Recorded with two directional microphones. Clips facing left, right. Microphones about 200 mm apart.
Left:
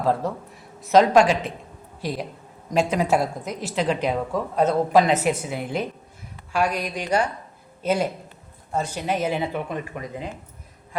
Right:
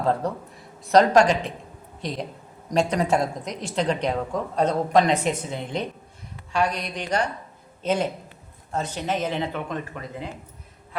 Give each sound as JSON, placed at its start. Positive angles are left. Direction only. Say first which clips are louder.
{"t": 0.0, "sound": "a woman's voice", "louder": "left 1 dB", "side_deg": 5}